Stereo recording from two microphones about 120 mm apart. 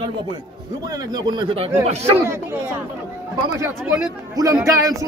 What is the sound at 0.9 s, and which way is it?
Speech, 35° right (ahead or behind).